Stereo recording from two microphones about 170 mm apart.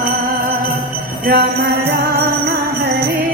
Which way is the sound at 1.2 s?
65° right (ahead or behind).